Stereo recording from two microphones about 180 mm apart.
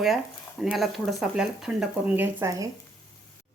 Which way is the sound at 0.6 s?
Centre (ahead or behind).